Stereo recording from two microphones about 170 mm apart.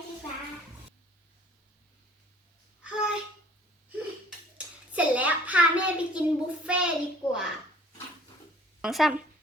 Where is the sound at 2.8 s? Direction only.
5° right (ahead or behind).